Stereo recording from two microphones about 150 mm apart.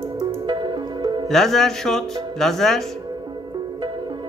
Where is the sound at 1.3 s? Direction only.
Centre (ahead or behind).